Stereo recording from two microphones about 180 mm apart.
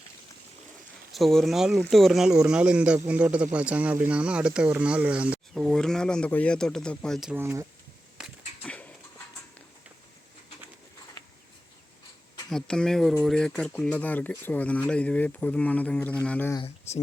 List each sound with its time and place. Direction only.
1.1 s speech: centre (ahead or behind); by 7.7 s 15° right (ahead or behind)
8.6 s a sound: 5° left (ahead or behind)
12.5 s speech: 5° left (ahead or behind)
16.6 s speech: 35° left (ahead or behind)